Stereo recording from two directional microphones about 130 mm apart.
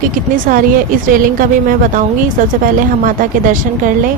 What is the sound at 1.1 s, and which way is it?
A woman's voice, 90° right.